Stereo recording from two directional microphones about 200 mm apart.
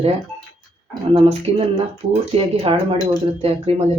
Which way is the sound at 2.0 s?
30° right (ahead or behind).